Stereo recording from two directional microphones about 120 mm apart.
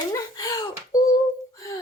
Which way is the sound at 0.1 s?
30° left (ahead or behind).